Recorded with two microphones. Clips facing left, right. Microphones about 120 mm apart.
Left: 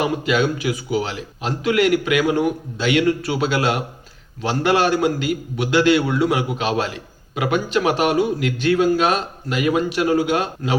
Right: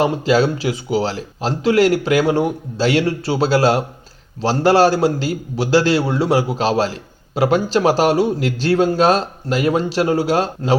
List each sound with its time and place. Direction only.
0.0 s a man's voice: 30° right (ahead or behind)